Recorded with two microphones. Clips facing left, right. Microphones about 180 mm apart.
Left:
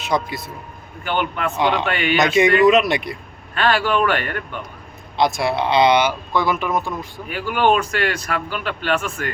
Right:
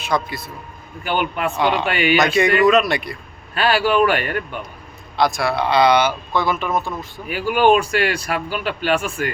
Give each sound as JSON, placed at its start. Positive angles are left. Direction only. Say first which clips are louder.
{"t": 0.0, "sound": "a man's voice", "louder": "even", "side_deg": 20}
{"t": 1.0, "sound": "speech", "louder": "right 1 dB", "side_deg": -10}
{"t": 2.1, "sound": "speech", "louder": "left 2 dB", "side_deg": 20}
{"t": 3.5, "sound": "speech", "louder": "right 1 dB", "side_deg": -10}
{"t": 5.1, "sound": "speech", "louder": "even", "side_deg": 20}
{"t": 7.3, "sound": "speech", "louder": "right 3 dB", "side_deg": -10}